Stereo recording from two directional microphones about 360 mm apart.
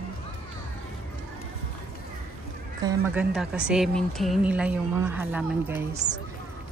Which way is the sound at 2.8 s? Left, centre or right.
Centre.